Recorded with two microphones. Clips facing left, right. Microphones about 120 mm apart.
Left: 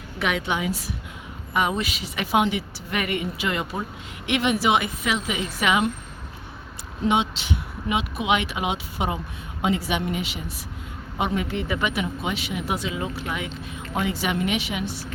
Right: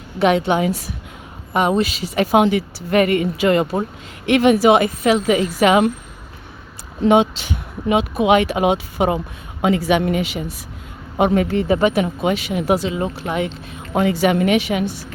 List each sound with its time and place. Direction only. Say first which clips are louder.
0.2 s speech: right 10 dB; 30° right (ahead or behind)
0.6 s speech: right 7 dB; 45° right (ahead or behind)
1.5 s speech: right 7 dB; 35° right (ahead or behind)
7.1 s speech: right 9 dB; 45° right (ahead or behind); by 10.2 s 70° right (ahead or behind)
11.2 s speech: right 9 dB; 45° right (ahead or behind)
12.2 s speech: right 9 dB; 45° right (ahead or behind)
12.8 s speech: right 6 dB; 35° right (ahead or behind)
13.9 s speech: right 9 dB; 55° right (ahead or behind)